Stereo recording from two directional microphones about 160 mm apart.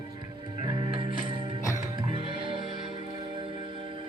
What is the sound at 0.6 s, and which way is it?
Music, 30° right (ahead or behind).